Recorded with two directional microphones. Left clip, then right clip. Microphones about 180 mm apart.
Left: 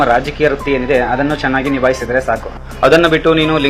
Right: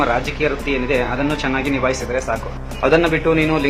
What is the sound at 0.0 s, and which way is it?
Speech, 20° left (ahead or behind).